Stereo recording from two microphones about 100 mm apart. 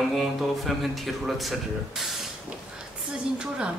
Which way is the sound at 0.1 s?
Centre (ahead or behind).